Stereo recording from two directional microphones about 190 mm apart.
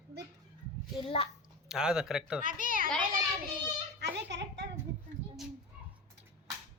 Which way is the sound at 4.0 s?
65° right (ahead or behind).